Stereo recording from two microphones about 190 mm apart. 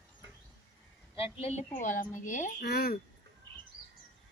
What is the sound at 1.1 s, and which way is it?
A woman's voice, 30° left (ahead or behind).